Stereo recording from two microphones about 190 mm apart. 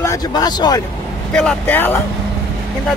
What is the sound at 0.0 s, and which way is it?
Speech, 20° left (ahead or behind).